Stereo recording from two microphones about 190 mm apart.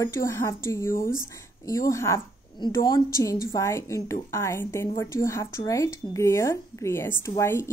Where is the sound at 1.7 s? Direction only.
15° left (ahead or behind).